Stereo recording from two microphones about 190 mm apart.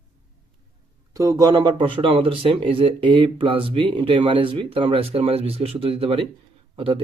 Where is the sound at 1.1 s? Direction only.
15° right (ahead or behind).